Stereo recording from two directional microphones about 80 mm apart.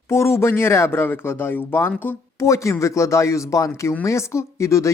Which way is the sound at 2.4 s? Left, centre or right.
Left.